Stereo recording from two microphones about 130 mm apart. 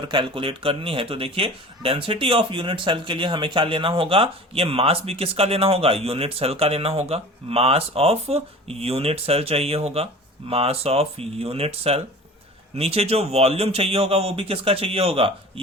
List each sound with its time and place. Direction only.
0.1 s a man's voice: 40° right (ahead or behind)